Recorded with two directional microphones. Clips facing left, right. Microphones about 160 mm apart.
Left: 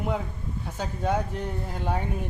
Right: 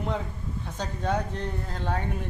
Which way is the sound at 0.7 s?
10° left (ahead or behind).